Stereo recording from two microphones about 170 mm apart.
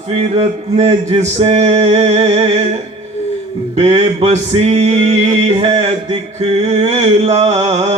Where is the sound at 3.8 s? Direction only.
40° right (ahead or behind).